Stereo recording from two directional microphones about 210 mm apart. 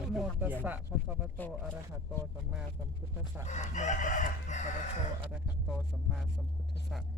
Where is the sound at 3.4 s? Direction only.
35° left (ahead or behind).